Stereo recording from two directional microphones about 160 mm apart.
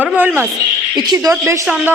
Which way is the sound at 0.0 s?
10° right (ahead or behind).